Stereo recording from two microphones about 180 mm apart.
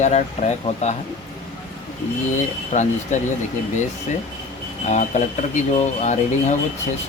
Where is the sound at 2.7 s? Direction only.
45° left (ahead or behind).